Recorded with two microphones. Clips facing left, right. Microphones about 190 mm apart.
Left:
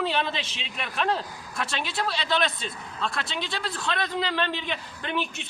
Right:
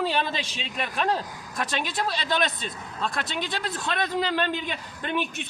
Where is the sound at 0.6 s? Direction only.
45° right (ahead or behind).